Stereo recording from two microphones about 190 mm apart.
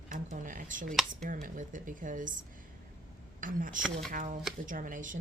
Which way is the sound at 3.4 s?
45° right (ahead or behind).